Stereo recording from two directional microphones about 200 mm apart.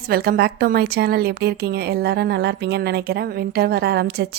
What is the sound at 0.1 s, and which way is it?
Speech, 50° right (ahead or behind).